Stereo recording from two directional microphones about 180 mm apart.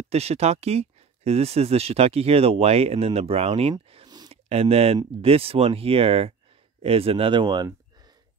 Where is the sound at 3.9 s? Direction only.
25° right (ahead or behind).